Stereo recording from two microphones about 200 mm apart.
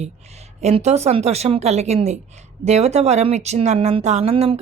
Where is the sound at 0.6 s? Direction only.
35° right (ahead or behind).